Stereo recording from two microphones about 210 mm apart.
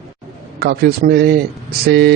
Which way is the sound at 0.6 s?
50° right (ahead or behind).